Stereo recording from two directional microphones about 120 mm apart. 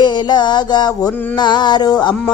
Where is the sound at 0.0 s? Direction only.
35° left (ahead or behind).